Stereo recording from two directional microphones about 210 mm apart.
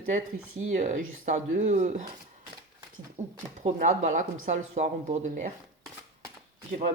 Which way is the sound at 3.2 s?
35° right (ahead or behind).